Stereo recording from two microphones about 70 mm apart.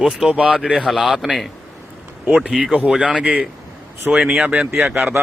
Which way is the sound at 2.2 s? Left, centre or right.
Right.